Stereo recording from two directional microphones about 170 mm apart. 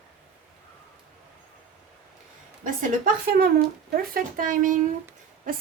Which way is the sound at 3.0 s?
60° right (ahead or behind).